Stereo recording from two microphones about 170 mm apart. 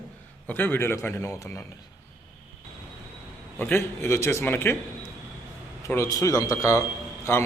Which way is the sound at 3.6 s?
10° left (ahead or behind).